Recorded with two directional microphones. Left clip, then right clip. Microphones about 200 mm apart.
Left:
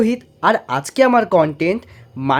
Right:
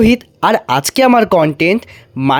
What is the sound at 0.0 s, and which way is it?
Speech, 40° right (ahead or behind).